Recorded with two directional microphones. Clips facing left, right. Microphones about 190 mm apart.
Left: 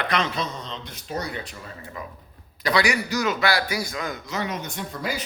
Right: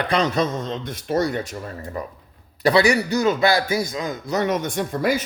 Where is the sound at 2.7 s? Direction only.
30° right (ahead or behind).